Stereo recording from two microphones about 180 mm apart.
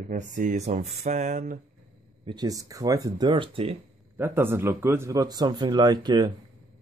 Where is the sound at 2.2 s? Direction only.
25° right (ahead or behind).